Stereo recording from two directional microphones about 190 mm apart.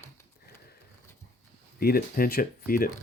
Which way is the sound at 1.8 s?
55° left (ahead or behind).